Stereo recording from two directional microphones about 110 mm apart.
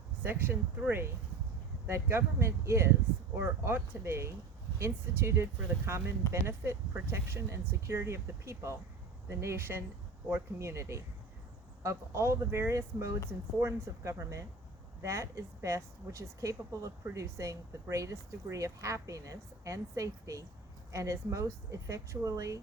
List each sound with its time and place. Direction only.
0.2 s a woman's voice: 20° right (ahead or behind)